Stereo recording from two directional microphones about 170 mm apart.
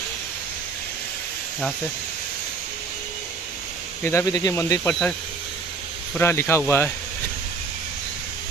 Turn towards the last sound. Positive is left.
turn(degrees=15)  # may be behind; listen again after turning